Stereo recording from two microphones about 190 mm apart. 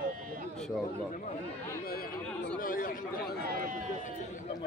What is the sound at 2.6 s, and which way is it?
Chatter, 45° left (ahead or behind).